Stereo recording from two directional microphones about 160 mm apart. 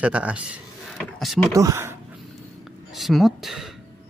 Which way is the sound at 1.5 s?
20° right (ahead or behind).